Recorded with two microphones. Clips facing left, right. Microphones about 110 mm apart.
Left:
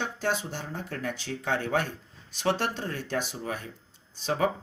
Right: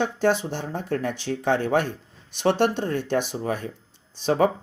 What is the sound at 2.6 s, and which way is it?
Speech, 60° right (ahead or behind).